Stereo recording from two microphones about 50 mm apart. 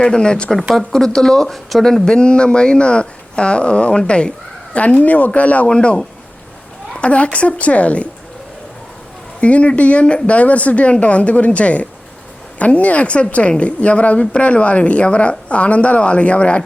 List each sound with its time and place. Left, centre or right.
0.0 s speech: centre
0.7 s speech: centre; by 8.0 s left
9.4 s speech: left